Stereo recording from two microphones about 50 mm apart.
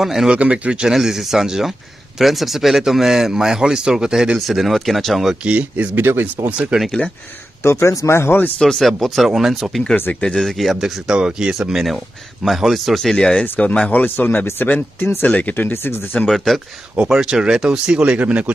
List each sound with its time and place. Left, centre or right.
0.0 s a man's voice: centre
0.3 s speech: right
0.8 s a man's voice: centre
4.5 s speech: centre
5.4 s speech: right
5.9 s speech: right
6.7 s a man's voice: centre
7.6 s speech: left
8.5 s speech: centre
8.8 s speech: centre
11.1 s a man's voice: centre
14.0 s speech: left
16.3 s speech: centre
17.0 s speech: centre